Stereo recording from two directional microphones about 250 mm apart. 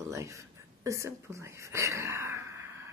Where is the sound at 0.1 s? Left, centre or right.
Centre.